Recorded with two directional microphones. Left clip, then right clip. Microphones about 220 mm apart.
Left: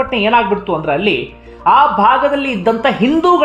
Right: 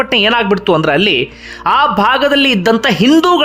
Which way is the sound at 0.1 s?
20° right (ahead or behind).